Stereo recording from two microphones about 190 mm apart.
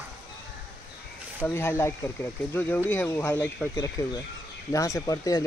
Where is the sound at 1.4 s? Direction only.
10° left (ahead or behind).